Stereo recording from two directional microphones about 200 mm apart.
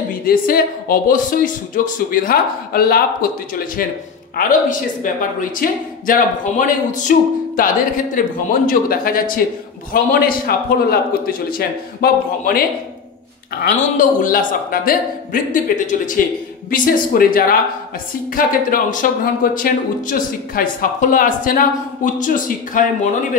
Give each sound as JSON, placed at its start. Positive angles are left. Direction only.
{"t": 0.2, "sound": "speech", "side_deg": 45}
{"t": 13.7, "sound": "speech", "side_deg": 40}